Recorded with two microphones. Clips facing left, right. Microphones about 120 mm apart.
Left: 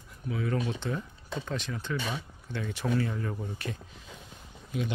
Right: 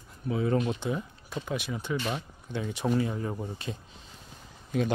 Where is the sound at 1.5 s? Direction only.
10° right (ahead or behind).